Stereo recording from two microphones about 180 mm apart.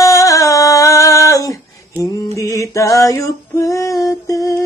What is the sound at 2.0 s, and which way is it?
Female singing, 15° left (ahead or behind).